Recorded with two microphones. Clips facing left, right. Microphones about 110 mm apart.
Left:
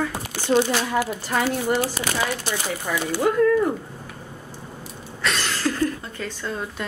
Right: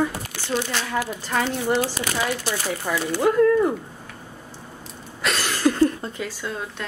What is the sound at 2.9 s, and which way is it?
Speech, 10° right (ahead or behind).